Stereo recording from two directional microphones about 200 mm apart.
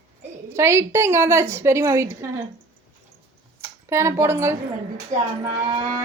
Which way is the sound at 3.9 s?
15° right (ahead or behind).